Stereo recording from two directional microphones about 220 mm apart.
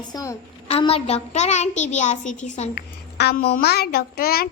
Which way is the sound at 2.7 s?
50° left (ahead or behind).